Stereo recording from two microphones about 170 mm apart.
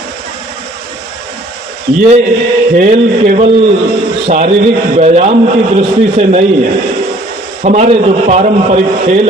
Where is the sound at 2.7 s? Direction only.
55° right (ahead or behind); by 6.4 s 40° right (ahead or behind).